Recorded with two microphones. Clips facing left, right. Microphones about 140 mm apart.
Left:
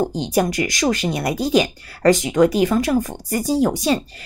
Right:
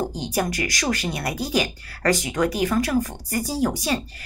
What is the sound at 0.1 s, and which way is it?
Speech, 20° left (ahead or behind).